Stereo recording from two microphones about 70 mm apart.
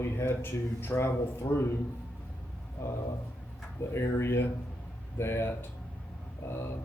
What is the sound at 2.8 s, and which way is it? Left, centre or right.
Speech, left.